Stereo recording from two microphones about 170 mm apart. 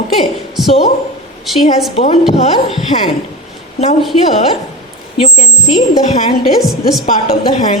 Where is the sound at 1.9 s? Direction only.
40° left (ahead or behind).